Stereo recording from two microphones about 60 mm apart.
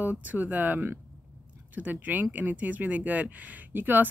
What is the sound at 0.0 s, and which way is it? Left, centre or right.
Speech, right.